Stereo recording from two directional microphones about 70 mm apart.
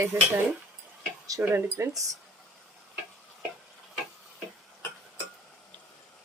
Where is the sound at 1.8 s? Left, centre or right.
Right.